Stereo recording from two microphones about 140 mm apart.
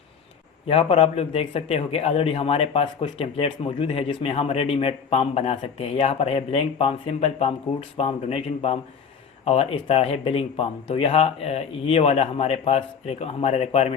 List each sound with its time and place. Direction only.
0.7 s a man's voice: 40° left (ahead or behind)